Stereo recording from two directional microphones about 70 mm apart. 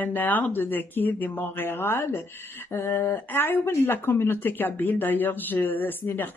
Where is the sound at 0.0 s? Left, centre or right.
Left.